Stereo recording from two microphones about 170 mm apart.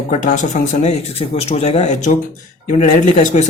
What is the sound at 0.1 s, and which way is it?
Speech, 45° left (ahead or behind).